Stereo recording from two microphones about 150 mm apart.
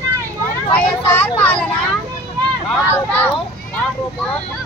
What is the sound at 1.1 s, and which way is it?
Vehicle, 10° left (ahead or behind).